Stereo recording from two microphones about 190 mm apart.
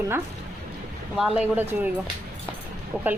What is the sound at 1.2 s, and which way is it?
Speech, 10° right (ahead or behind).